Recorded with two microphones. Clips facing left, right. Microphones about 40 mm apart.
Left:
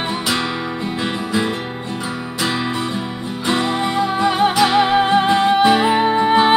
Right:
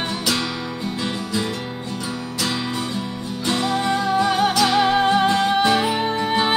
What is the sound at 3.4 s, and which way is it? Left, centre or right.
Music, left.